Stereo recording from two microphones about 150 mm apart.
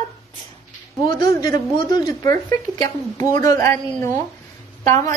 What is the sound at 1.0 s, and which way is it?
A woman's voice, 25° left (ahead or behind).